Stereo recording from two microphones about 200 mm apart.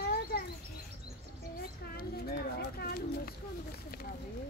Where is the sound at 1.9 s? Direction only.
50° left (ahead or behind).